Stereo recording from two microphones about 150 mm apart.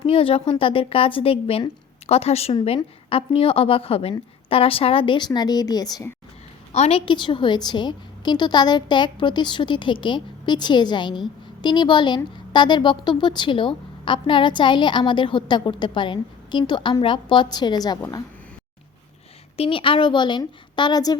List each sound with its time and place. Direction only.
0.0 s speech: 40° left (ahead or behind)
6.7 s speech: 45° left (ahead or behind); by 18.0 s 25° left (ahead or behind)
19.5 s speech: 40° left (ahead or behind)